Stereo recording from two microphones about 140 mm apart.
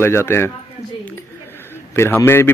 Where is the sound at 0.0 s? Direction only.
15° left (ahead or behind).